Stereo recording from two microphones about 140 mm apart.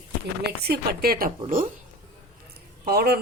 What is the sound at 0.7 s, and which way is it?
Speech, 90° right.